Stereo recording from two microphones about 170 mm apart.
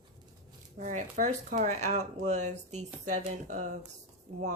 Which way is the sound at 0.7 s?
45° right (ahead or behind).